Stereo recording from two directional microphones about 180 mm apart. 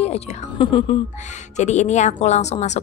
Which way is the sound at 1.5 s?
40° left (ahead or behind).